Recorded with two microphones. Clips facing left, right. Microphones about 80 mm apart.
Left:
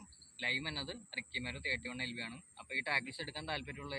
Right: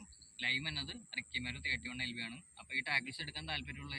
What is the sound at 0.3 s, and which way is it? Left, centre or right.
A man's voice, left.